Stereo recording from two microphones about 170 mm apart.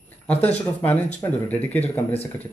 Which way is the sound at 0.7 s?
10° left (ahead or behind).